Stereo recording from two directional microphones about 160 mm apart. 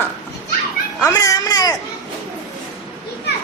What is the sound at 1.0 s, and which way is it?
Speech, 20° left (ahead or behind).